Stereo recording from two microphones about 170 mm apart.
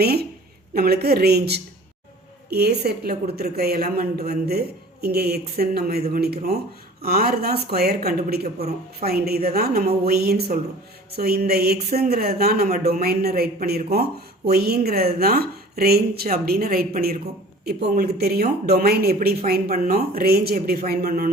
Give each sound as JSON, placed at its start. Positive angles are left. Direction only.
{"t": 0.0, "sound": "a woman's voice", "side_deg": -65}